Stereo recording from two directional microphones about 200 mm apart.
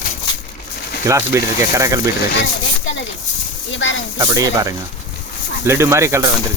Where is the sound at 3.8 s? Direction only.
70° left (ahead or behind).